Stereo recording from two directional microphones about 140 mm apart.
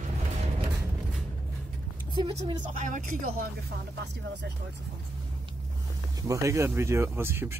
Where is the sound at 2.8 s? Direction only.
70° right (ahead or behind); by 3.5 s 90° right.